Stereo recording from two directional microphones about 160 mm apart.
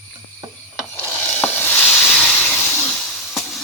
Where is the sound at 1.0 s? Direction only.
10° left (ahead or behind).